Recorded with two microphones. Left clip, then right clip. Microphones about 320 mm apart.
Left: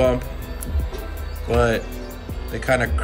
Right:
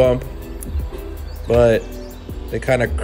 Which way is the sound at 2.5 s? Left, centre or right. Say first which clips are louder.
Right 2 dB; centre.